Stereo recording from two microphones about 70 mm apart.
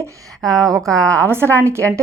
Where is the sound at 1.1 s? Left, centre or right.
Right.